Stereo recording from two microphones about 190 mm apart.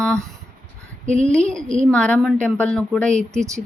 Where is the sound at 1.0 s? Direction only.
40° right (ahead or behind).